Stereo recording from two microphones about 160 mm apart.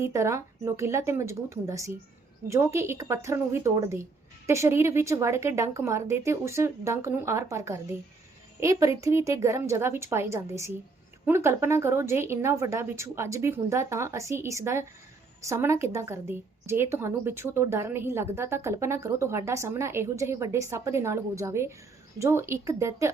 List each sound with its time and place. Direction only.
0.0 s a woman's voice: 15° right (ahead or behind)